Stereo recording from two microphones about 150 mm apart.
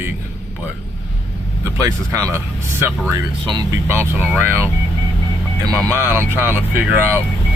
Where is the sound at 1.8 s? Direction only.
20° right (ahead or behind).